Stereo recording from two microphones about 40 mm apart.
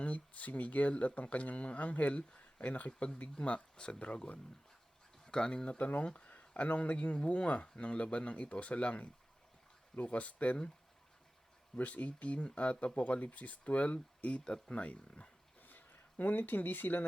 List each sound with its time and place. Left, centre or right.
0.0 s speech: left
3.3 s speech: left
5.7 s speech: left
11.8 s speech: left
15.6 s speech: left